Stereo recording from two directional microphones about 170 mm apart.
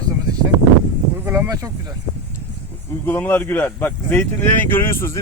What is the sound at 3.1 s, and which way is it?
Speech, 10° left (ahead or behind).